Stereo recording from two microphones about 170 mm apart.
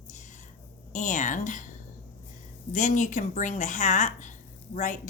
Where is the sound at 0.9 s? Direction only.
45° left (ahead or behind).